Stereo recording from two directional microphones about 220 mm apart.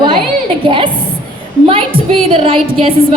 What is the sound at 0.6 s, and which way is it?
Speech, 25° right (ahead or behind).